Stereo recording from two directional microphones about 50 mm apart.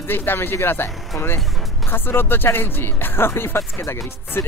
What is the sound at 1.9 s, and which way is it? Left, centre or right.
Speech, left.